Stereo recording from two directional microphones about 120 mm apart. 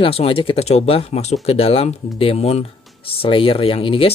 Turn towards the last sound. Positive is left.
turn(degrees=50)  # may be behind; listen again after turning